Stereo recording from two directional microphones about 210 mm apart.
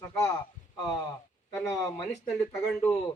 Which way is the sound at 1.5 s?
15° left (ahead or behind).